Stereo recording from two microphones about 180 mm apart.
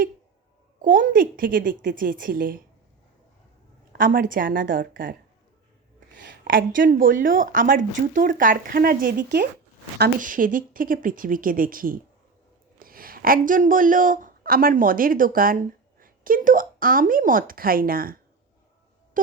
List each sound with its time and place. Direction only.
0.8 s speech: 50° right (ahead or behind)
3.9 s speech: 50° right (ahead or behind)
6.2 s speech: 55° right (ahead or behind)
10.0 s speech: 50° right (ahead or behind)
19.2 s music: 50° right (ahead or behind)